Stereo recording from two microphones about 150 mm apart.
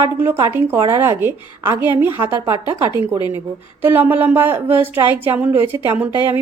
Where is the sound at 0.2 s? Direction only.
15° right (ahead or behind).